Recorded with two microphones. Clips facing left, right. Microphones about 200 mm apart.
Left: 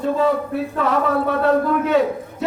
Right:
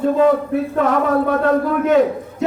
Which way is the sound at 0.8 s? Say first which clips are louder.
Right 2 dB; 45° right (ahead or behind).